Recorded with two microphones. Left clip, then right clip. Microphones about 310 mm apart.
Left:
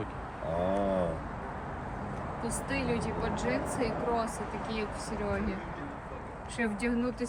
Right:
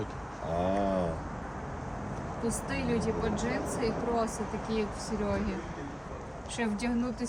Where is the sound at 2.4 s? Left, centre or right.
Right.